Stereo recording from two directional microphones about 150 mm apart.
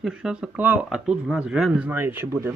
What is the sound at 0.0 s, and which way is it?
Speech, 5° right (ahead or behind).